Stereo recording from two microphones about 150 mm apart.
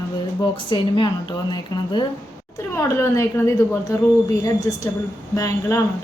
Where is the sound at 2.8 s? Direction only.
20° left (ahead or behind).